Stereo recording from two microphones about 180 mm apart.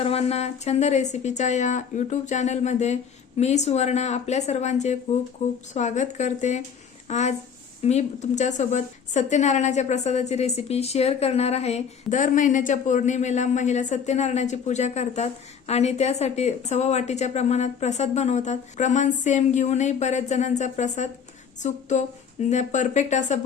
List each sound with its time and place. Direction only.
0.0 s a woman's voice: 35° left (ahead or behind)